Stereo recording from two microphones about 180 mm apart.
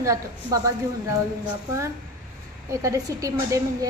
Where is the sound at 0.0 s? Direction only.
20° right (ahead or behind).